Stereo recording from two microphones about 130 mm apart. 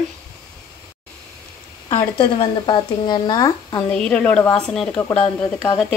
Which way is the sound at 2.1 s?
40° left (ahead or behind).